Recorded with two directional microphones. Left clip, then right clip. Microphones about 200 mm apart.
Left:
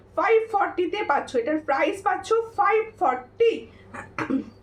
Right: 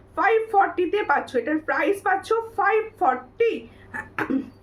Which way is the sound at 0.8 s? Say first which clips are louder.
Right 2 dB; 15° right (ahead or behind).